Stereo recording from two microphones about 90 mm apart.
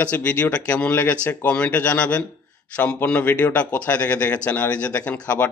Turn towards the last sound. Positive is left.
turn(degrees=15)  # may be behind; listen again after turning